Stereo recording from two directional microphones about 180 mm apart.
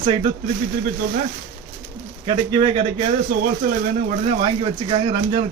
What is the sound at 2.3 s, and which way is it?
Speech, 30° right (ahead or behind).